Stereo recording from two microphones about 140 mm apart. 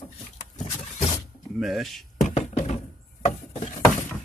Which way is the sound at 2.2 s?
55° left (ahead or behind).